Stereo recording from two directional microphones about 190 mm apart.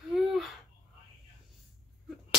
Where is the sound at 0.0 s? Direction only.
Centre (ahead or behind).